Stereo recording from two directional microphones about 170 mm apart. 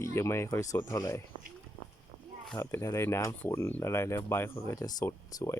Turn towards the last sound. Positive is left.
turn(degrees=20)  # may be behind; listen again after turning